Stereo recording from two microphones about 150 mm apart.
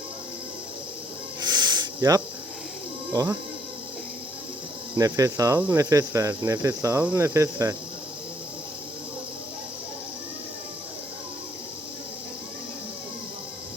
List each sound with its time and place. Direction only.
1.4 s a sound: 30° right (ahead or behind)
3.1 s cricket: 25° right (ahead or behind)
4.9 s cricket: 25° right (ahead or behind)